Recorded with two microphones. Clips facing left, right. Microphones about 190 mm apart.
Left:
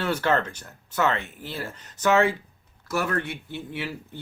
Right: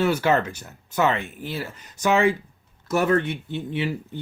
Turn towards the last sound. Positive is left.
turn(degrees=-20)  # may be behind; listen again after turning